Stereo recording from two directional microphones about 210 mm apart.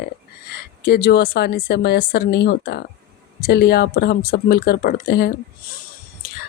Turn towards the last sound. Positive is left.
turn(degrees=45)  # may be behind; listen again after turning